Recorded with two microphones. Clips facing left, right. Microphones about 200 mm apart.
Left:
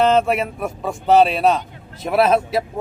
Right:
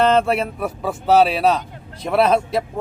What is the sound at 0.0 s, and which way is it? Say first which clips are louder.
Speech: even; centre (ahead or behind).